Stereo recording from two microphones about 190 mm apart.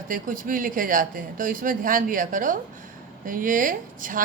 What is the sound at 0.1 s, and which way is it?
A woman's voice, 45° right (ahead or behind).